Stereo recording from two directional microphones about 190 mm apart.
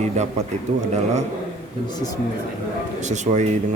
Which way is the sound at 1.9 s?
20° left (ahead or behind).